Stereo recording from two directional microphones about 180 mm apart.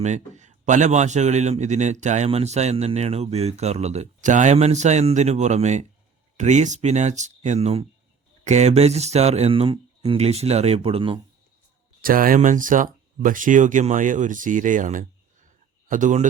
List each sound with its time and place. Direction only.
0.0 s a man's voice: 40° right (ahead or behind)
12.0 s speech: 50° right (ahead or behind)